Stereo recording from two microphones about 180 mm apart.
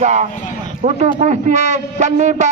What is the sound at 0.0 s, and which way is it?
A man's voice, 40° right (ahead or behind).